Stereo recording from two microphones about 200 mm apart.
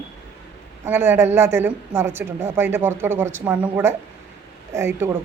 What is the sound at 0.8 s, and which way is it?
A woman's voice, 10° right (ahead or behind).